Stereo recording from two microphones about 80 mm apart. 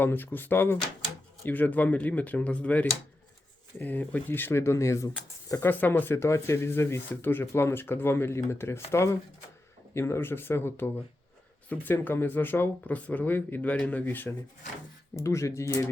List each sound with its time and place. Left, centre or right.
0.0 s speech: left
5.6 s speech: left
15.1 s speech: left